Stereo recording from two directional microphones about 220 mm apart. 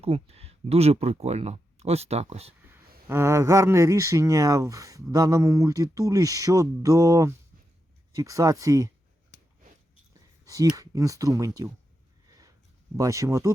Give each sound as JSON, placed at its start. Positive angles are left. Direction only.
{"t": 0.0, "sound": "speech", "side_deg": -25}
{"t": 2.6, "sound": "a sound", "side_deg": -10}
{"t": 3.1, "sound": "speech", "side_deg": -10}
{"t": 10.4, "sound": "speech", "side_deg": -15}
{"t": 13.0, "sound": "speech", "side_deg": -15}